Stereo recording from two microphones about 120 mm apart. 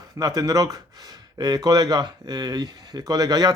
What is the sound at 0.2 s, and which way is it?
Speech, 30° right (ahead or behind).